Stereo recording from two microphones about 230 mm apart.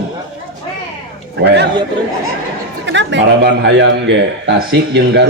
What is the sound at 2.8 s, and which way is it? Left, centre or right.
A man's voice, right.